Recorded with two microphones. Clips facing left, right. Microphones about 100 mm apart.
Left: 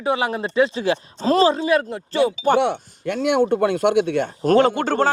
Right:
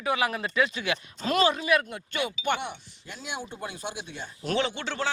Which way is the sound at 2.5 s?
80° left.